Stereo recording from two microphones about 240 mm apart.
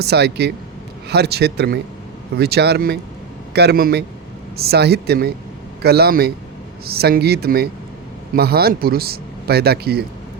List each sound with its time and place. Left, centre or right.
0.0 s speech: right